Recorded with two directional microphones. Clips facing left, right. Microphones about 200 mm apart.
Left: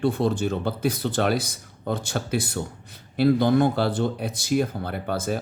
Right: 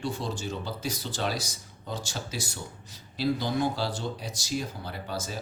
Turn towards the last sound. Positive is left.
turn(degrees=55)  # may be behind; listen again after turning